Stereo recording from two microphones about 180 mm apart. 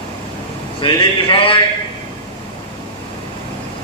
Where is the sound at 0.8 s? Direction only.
30° left (ahead or behind).